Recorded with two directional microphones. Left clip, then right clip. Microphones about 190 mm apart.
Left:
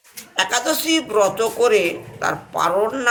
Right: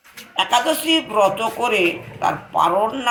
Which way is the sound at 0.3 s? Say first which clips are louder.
Right 2 dB; 25° left (ahead or behind).